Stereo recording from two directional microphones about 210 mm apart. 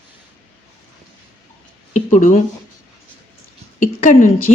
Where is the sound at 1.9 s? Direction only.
35° left (ahead or behind).